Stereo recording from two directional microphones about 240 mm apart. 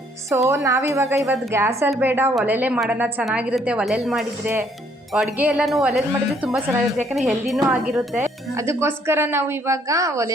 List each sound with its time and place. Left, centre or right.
0.4 s a woman's voice: centre